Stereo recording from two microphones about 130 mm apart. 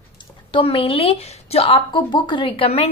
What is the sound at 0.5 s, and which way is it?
A woman's voice, 45° left (ahead or behind).